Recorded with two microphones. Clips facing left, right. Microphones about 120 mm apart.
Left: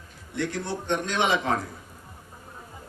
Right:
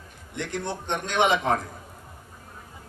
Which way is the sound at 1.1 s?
55° right (ahead or behind).